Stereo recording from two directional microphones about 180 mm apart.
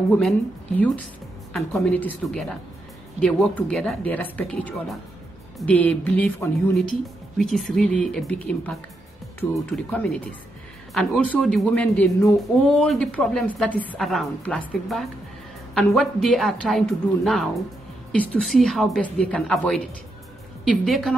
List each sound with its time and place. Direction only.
0.1 s a woman's voice: 5° left (ahead or behind)
20.8 s a woman's voice: centre (ahead or behind)